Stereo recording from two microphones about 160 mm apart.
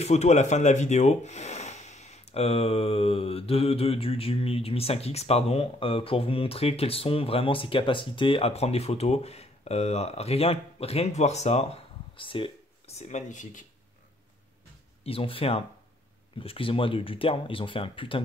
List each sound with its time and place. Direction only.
0.0 s speech: 45° left (ahead or behind)
13.0 s speech: 50° left (ahead or behind)
15.0 s speech: 35° left (ahead or behind)